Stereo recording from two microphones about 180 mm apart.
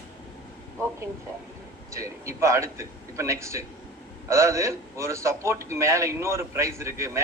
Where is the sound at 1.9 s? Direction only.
15° right (ahead or behind).